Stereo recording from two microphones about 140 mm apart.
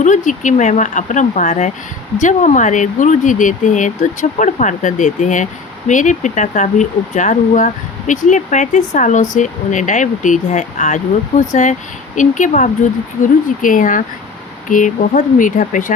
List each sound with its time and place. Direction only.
0.0 s speech: 65° left (ahead or behind)
13.6 s speech: 70° left (ahead or behind)